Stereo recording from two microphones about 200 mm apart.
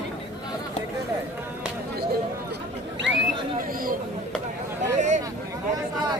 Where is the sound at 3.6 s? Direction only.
45° right (ahead or behind).